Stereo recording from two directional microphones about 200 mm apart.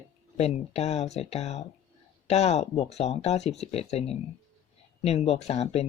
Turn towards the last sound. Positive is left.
turn(degrees=30)  # may be behind; listen again after turning